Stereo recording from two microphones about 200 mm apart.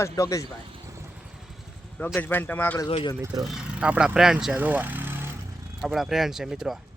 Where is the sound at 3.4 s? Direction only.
5° right (ahead or behind).